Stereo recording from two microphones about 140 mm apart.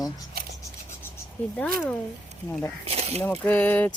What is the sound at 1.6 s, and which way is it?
Speech, 10° left (ahead or behind).